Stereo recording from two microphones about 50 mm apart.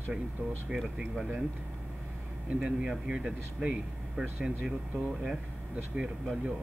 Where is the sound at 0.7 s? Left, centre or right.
Centre.